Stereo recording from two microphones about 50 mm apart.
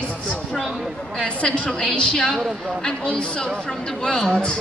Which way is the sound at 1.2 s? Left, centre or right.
Left.